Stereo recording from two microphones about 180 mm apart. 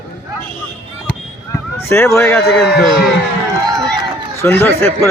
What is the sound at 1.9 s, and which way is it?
Speech, 15° left (ahead or behind).